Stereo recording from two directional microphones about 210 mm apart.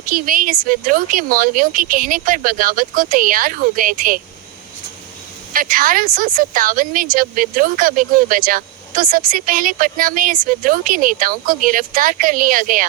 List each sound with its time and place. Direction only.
0.0 s speech: 40° right (ahead or behind)
5.5 s speech: 40° right (ahead or behind)